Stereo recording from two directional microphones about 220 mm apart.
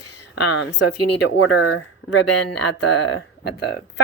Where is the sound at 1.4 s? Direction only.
65° left (ahead or behind); by 3.8 s 50° left (ahead or behind).